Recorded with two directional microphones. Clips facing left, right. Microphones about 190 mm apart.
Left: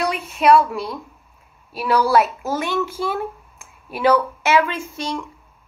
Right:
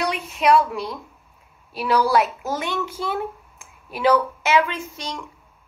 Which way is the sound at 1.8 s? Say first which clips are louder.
Left 2 dB; 20° right (ahead or behind).